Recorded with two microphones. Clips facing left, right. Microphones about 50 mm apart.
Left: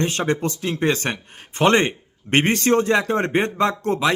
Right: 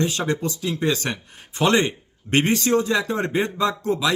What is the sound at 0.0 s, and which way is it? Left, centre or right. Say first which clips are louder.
Speech: left 2 dB; left.